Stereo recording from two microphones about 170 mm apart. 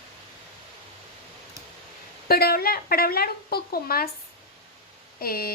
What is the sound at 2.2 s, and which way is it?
Speech, 65° left (ahead or behind).